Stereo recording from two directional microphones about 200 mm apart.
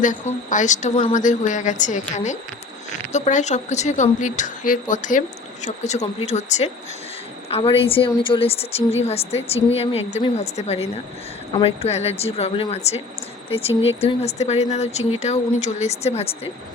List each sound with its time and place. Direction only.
0.0 s a woman's voice: 40° left (ahead or behind)